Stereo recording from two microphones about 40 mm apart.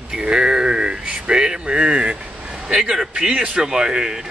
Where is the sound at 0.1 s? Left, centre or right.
Centre.